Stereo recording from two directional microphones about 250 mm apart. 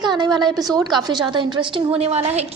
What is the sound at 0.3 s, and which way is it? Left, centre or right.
A woman's voice, centre.